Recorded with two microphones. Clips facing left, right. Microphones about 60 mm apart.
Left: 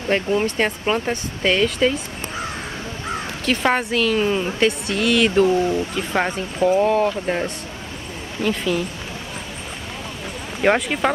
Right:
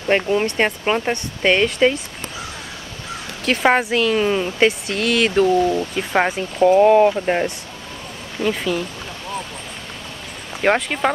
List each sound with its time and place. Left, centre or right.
0.1 s speech: right
3.6 s speech: centre
5.8 s speech: centre
8.4 s speech: centre
10.6 s speech: centre